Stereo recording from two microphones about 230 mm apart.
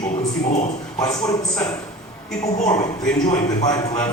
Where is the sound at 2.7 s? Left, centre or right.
Left.